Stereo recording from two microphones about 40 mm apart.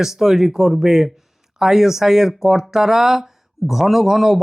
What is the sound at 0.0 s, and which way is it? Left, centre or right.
A man's voice, centre.